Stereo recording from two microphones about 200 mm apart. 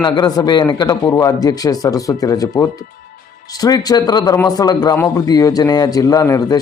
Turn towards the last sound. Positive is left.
turn(degrees=15)  # may be behind; listen again after turning